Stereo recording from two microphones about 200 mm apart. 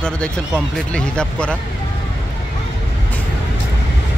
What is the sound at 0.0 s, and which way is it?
Speech, 5° left (ahead or behind).